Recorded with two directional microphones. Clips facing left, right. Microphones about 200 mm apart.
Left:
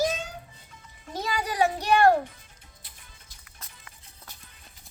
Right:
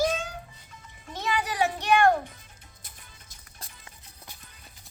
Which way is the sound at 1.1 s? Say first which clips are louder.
Even; 40° left (ahead or behind).